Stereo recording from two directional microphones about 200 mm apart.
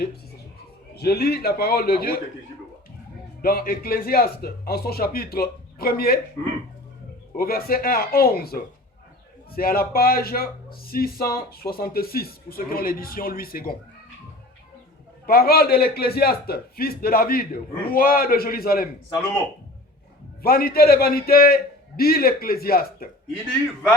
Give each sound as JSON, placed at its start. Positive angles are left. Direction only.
{"t": 0.9, "sound": "speech", "side_deg": 50}
{"t": 3.4, "sound": "speech", "side_deg": 45}
{"t": 7.3, "sound": "speech", "side_deg": 50}
{"t": 15.3, "sound": "speech", "side_deg": 50}
{"t": 20.4, "sound": "speech", "side_deg": 50}